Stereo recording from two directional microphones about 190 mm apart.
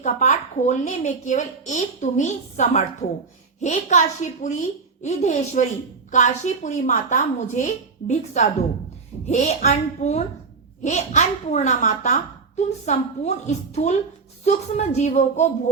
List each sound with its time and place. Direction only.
0.0 s a woman's voice: 40° left (ahead or behind)